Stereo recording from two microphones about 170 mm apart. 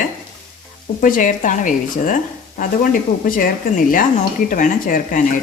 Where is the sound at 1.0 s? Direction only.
50° left (ahead or behind).